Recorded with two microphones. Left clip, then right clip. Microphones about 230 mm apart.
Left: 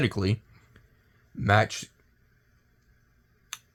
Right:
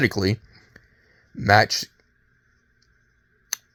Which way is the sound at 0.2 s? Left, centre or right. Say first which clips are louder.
Right 6 dB; right.